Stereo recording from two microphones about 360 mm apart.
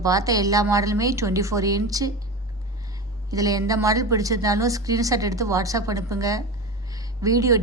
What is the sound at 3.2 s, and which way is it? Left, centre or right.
A woman's voice, centre.